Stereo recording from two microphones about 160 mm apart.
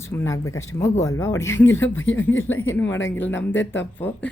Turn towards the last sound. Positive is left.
turn(degrees=15)  # may be behind; listen again after turning